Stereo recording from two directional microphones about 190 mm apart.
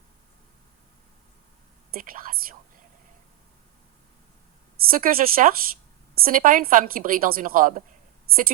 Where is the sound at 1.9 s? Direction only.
50° right (ahead or behind).